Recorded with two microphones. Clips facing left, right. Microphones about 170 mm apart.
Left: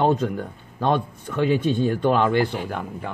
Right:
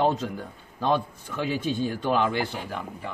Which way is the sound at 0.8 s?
60° left (ahead or behind).